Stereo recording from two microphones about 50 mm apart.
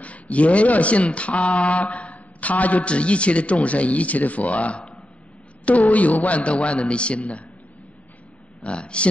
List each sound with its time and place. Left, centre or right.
0.0 s speech: left
8.6 s speech: left